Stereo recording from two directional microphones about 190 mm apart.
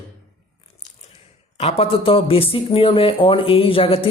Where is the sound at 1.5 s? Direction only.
35° left (ahead or behind).